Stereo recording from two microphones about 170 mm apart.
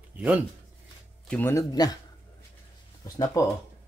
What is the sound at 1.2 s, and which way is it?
Speech, 10° left (ahead or behind).